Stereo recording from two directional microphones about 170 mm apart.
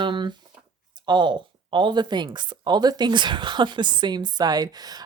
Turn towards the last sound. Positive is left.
turn(degrees=-25)  # may be behind; listen again after turning